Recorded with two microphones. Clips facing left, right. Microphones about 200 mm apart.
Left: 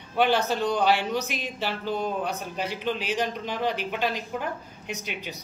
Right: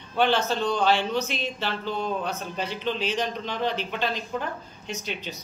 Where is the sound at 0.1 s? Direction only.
10° left (ahead or behind).